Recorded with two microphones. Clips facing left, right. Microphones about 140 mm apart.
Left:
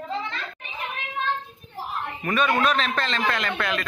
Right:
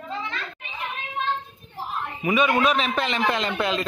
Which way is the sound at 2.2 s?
5° right (ahead or behind).